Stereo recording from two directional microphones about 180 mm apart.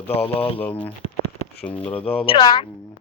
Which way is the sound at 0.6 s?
10° left (ahead or behind).